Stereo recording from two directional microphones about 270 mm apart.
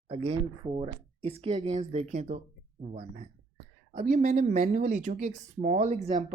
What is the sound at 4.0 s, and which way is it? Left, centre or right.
Speech, right.